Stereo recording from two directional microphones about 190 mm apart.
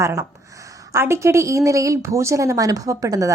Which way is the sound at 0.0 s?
15° right (ahead or behind).